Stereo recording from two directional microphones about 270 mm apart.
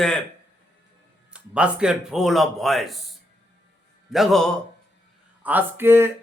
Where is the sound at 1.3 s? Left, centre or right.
Centre.